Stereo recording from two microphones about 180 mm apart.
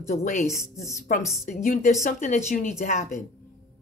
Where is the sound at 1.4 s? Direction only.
45° left (ahead or behind).